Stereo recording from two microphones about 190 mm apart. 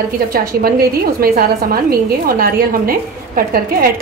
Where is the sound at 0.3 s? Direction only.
50° right (ahead or behind).